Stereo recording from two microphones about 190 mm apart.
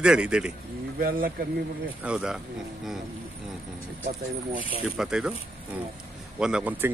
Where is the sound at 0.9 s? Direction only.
50° right (ahead or behind).